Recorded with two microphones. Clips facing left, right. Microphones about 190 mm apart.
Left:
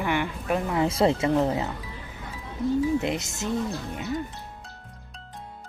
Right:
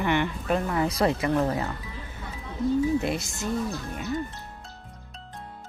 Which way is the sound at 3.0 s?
20° left (ahead or behind).